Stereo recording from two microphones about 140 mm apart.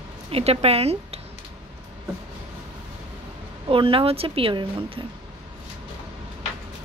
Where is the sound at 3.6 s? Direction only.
40° right (ahead or behind).